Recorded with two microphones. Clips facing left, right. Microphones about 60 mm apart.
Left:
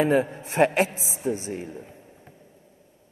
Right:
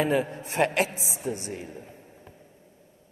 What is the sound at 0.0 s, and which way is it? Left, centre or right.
A man's voice, left.